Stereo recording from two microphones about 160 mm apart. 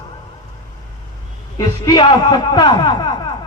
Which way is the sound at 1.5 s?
25° left (ahead or behind).